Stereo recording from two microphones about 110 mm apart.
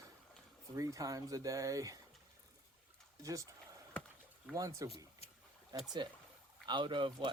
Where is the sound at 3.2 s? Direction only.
30° right (ahead or behind).